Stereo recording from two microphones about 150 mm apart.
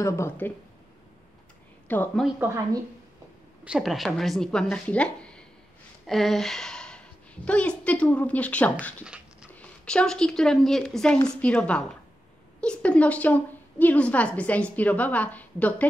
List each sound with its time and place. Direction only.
0.0 s a woman's voice: 20° left (ahead or behind)
1.9 s a woman's voice: 10° left (ahead or behind)
2.4 s speech: 20° right (ahead or behind)
3.6 s a woman's voice: 5° right (ahead or behind)
9.0 s dog: 5° right (ahead or behind)
9.5 s a woman's voice: 10° left (ahead or behind)